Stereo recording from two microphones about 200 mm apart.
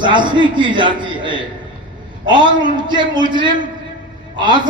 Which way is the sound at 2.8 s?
20° right (ahead or behind).